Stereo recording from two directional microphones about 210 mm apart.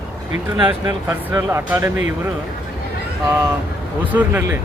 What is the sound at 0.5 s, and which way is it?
Speech, 20° right (ahead or behind).